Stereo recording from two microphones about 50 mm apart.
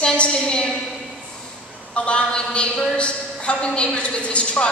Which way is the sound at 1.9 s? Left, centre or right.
Left.